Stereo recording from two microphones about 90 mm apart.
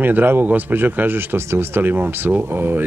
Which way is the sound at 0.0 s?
20° right (ahead or behind).